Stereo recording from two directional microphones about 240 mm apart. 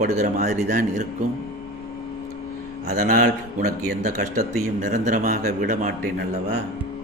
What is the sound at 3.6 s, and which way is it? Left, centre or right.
Speech, right.